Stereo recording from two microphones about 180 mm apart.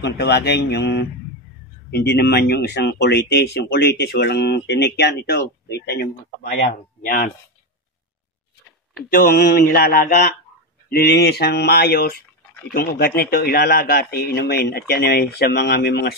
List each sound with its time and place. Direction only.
0.0 s speech: 70° left (ahead or behind)
9.1 s speech: 55° left (ahead or behind)